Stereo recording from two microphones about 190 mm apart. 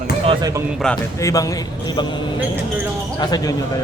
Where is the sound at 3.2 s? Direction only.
20° left (ahead or behind).